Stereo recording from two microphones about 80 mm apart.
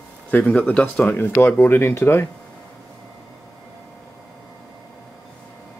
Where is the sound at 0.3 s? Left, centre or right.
Left.